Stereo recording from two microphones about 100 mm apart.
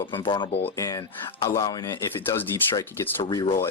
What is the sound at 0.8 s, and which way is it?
Speech, 35° left (ahead or behind).